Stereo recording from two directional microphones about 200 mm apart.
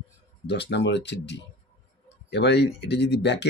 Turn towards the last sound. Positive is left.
turn(degrees=60)  # may be behind; listen again after turning